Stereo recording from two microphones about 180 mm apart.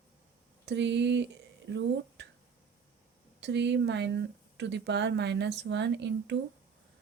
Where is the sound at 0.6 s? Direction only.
75° right (ahead or behind).